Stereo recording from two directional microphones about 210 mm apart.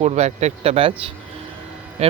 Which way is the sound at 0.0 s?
30° right (ahead or behind).